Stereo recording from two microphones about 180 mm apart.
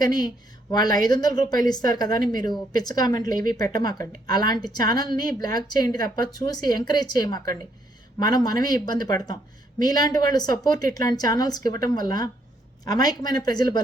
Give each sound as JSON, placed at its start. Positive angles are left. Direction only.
{"t": 0.0, "sound": "speech", "side_deg": 20}